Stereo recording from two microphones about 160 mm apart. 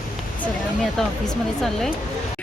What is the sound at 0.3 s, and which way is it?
Speech, 5° left (ahead or behind).